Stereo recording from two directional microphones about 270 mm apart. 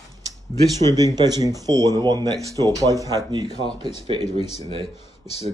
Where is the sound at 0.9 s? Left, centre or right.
Centre.